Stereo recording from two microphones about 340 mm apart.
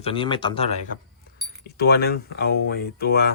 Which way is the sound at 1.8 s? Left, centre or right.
Left.